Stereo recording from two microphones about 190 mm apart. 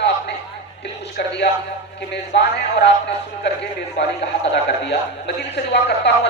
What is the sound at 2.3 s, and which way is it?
Speech, 65° left (ahead or behind).